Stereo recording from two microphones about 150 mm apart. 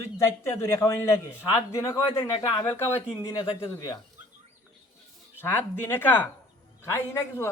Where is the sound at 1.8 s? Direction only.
20° left (ahead or behind).